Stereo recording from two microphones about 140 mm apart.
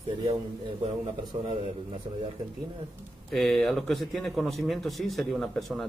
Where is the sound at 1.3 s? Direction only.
40° right (ahead or behind).